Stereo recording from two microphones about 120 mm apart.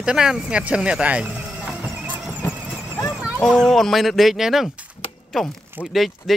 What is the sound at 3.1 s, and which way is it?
Dog, 5° right (ahead or behind).